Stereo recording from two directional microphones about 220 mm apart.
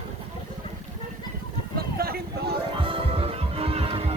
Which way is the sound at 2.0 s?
45° right (ahead or behind).